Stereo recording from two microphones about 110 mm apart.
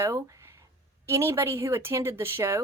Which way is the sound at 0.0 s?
25° right (ahead or behind).